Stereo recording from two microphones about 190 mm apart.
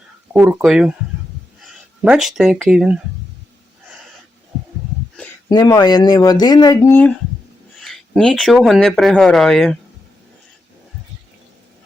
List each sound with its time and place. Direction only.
0.3 s speech: 5° right (ahead or behind)
5.5 s speech: 20° left (ahead or behind)
7.8 s speech: centre (ahead or behind)